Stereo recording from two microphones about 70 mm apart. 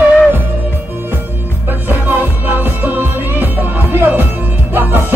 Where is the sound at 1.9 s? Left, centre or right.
Right.